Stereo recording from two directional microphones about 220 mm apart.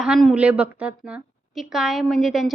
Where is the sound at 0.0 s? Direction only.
Centre (ahead or behind).